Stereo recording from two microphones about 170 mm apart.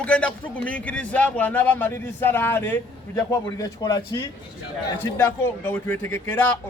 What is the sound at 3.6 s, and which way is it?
Speech, 25° left (ahead or behind).